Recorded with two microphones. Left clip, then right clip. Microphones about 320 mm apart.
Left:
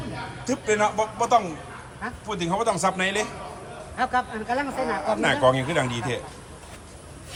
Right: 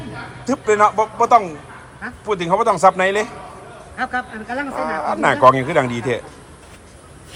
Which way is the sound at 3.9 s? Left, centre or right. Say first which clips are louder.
Right 1 dB; left.